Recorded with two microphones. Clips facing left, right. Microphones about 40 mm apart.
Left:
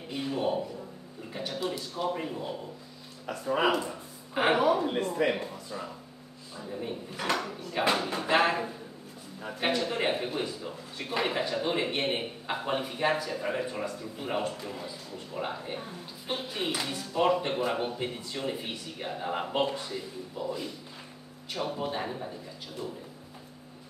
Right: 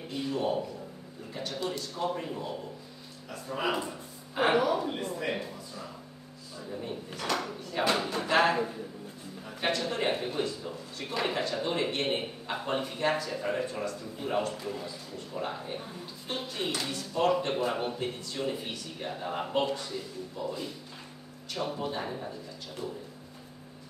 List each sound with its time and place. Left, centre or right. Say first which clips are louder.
0.1 s a man's voice: left 1 dB; centre
3.3 s speech: left 5 dB; left
4.4 s a woman's voice: left 1 dB; left
5.4 s a sound: left 3 dB; left
6.6 s speech: left 1 dB; centre
9.5 s speech: left 2 dB; centre
14.5 s a man's voice: right 1 dB; centre
14.9 s speech: even; centre
20.4 s a man's voice: left 1 dB; centre